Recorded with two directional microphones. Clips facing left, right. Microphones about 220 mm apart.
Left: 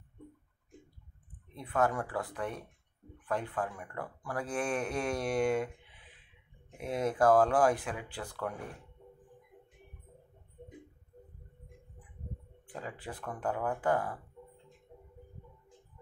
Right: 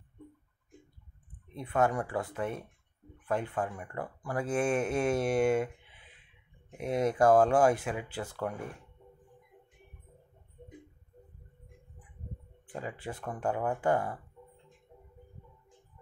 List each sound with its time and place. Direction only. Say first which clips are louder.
1.5 s speech: right 2 dB; 25° right (ahead or behind)
6.8 s speech: right 3 dB; 25° right (ahead or behind)
12.6 s speech: right 3 dB; 20° right (ahead or behind)